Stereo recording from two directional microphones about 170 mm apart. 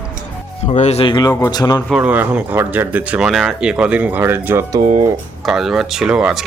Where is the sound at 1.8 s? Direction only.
5° right (ahead or behind); by 5.1 s 25° right (ahead or behind).